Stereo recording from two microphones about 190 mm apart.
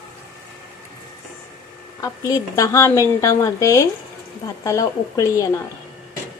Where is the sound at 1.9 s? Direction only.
15° left (ahead or behind).